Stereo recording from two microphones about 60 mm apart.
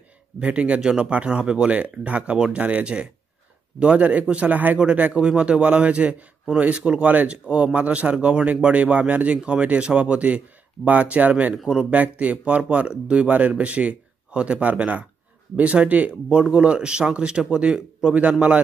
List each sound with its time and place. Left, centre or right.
0.4 s speech: right